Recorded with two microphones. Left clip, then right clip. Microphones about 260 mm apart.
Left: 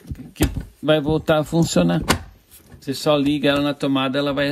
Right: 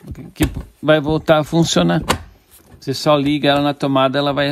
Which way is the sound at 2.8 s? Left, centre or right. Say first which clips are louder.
Right 3 dB; right.